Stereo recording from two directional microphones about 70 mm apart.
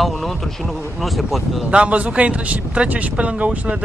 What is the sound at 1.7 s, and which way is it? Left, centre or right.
Speech, centre.